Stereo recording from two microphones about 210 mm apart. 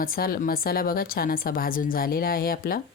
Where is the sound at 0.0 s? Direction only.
45° left (ahead or behind).